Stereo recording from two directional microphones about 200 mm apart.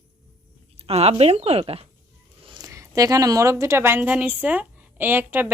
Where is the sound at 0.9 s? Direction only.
30° right (ahead or behind).